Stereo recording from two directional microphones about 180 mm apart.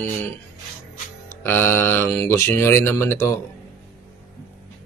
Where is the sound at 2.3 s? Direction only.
15° left (ahead or behind).